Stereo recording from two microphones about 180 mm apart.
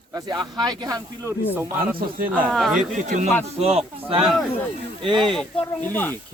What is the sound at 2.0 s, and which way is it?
Speech, 50° right (ahead or behind).